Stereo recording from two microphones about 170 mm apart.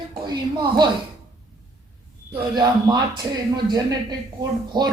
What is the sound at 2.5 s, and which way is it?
Speech, 25° right (ahead or behind).